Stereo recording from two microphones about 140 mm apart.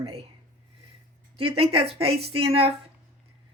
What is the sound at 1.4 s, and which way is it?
Speech, 45° right (ahead or behind).